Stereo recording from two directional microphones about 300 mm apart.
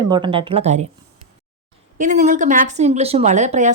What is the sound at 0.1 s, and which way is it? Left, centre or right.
Speech, centre.